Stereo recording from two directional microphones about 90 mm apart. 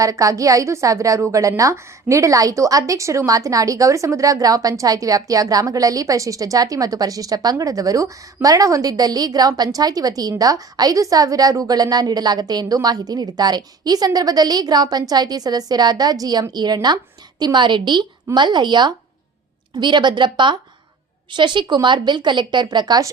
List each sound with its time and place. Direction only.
0.0 s a woman's voice: 40° right (ahead or behind)